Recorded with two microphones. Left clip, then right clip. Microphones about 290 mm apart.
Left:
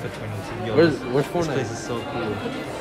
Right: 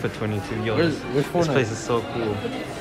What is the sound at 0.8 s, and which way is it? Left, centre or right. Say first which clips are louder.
Speech: left 6 dB; left.